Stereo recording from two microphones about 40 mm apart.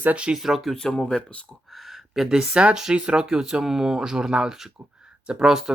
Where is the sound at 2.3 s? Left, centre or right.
Centre.